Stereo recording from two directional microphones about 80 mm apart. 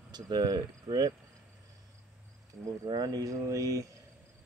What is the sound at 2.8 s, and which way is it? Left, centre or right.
Speech, right.